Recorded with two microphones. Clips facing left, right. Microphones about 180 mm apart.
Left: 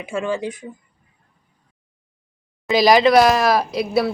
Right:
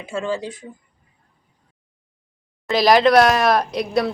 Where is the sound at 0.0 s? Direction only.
15° left (ahead or behind).